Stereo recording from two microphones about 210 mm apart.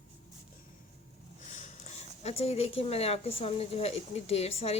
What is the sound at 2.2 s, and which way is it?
Speech, 30° left (ahead or behind).